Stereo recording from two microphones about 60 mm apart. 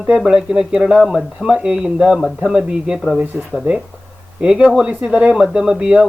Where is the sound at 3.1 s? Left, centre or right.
Right.